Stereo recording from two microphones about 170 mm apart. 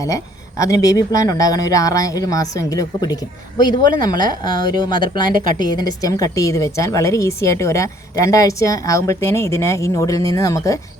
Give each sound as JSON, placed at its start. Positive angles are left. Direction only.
{"t": 0.6, "sound": "speech", "side_deg": 20}